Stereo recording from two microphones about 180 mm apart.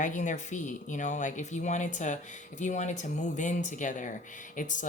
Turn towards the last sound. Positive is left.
turn(degrees=45)  # may be behind; listen again after turning